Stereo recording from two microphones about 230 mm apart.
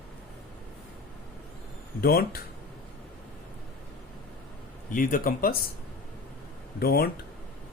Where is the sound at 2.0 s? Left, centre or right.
Left.